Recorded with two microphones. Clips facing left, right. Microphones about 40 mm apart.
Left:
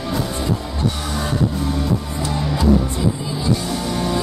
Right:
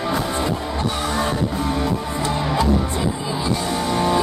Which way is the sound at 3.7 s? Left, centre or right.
Centre.